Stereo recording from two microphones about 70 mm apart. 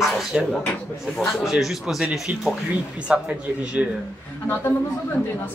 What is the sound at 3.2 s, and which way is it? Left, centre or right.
Speech, centre.